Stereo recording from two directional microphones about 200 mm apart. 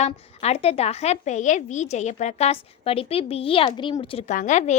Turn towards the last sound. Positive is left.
turn(degrees=35)  # may be behind; listen again after turning